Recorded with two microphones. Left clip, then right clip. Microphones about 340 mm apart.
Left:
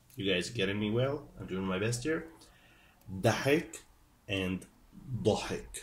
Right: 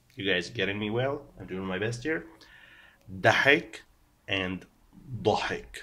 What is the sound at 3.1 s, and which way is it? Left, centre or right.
Speech, right.